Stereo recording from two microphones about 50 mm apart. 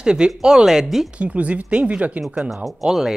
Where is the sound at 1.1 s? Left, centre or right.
Right.